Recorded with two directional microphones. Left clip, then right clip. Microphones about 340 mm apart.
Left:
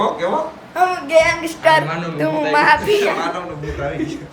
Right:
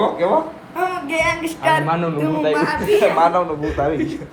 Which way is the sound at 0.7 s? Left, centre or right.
Centre.